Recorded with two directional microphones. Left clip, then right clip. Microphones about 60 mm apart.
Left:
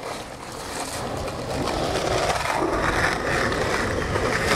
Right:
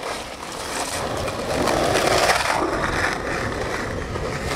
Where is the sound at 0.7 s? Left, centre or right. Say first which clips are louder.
Right 4 dB; right.